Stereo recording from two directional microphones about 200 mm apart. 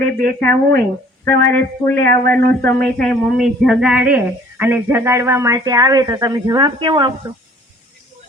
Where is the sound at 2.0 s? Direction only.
50° right (ahead or behind).